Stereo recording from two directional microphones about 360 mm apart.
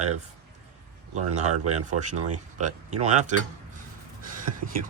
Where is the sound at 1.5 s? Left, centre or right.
Right.